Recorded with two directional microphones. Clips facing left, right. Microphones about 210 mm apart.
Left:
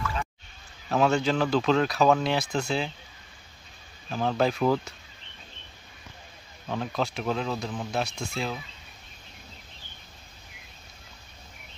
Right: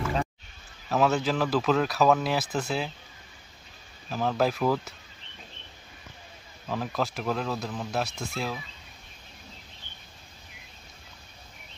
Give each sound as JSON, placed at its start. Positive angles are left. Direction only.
{"t": 0.0, "sound": "a sound", "side_deg": -35}
{"t": 0.8, "sound": "speech", "side_deg": -5}
{"t": 4.1, "sound": "speech", "side_deg": -5}
{"t": 6.7, "sound": "speech", "side_deg": 0}